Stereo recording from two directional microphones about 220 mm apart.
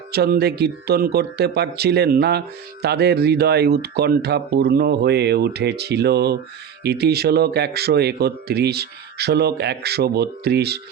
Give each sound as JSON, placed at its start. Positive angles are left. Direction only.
{"t": 0.1, "sound": "speech", "side_deg": -45}